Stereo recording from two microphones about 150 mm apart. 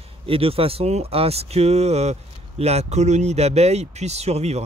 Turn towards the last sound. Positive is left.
turn(degrees=-45)  # may be behind; listen again after turning